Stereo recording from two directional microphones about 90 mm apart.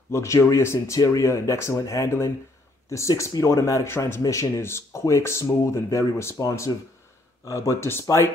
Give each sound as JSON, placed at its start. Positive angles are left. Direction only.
{"t": 0.1, "sound": "speech", "side_deg": 35}